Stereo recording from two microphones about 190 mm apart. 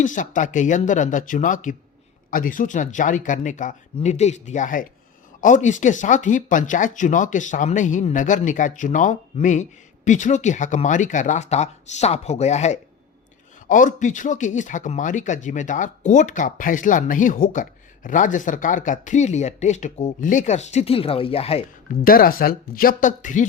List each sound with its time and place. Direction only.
0.0 s speech: 45° left (ahead or behind)
22.0 s speech: 50° left (ahead or behind)